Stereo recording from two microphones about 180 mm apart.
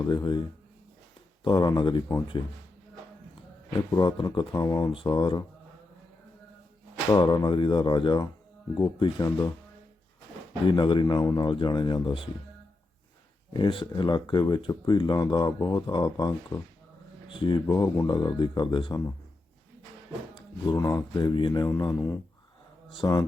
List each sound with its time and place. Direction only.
0.0 s speech: 25° left (ahead or behind)
1.5 s speech: 25° left (ahead or behind)
3.7 s speech: 25° left (ahead or behind)
7.1 s speech: 25° left (ahead or behind)
10.7 s speech: 25° left (ahead or behind)
13.5 s speech: 25° left (ahead or behind)
20.7 s speech: 20° left (ahead or behind)